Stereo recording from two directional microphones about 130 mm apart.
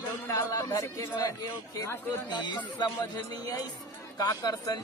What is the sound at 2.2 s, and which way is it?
Speech, 35° left (ahead or behind).